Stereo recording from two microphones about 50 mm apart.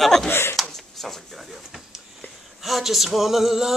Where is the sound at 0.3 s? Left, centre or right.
Left.